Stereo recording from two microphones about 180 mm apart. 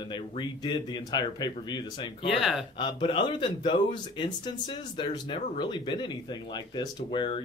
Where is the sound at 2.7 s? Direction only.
25° left (ahead or behind).